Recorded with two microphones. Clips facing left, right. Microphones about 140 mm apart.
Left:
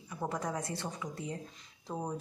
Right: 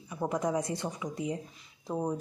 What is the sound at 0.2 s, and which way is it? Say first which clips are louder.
Speech: right 6 dB; 15° right (ahead or behind).